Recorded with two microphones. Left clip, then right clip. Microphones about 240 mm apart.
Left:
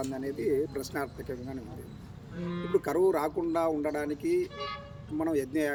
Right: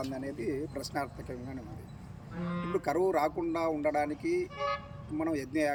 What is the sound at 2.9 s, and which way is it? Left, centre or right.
Speech, centre.